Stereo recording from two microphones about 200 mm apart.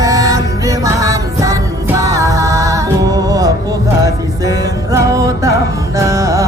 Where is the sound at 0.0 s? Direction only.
15° right (ahead or behind).